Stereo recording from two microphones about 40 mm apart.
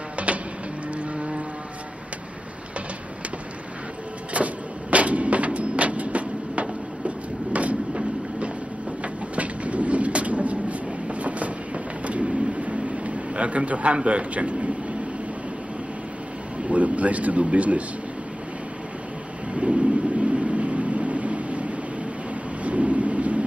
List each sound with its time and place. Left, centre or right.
1.1 s vehicle: right
4.4 s vehicle: right
4.9 s a sound: right
7.5 s printer: right
9.0 s train: right
16.6 s speech: right
19.5 s vehicle: right
22.6 s thunder: right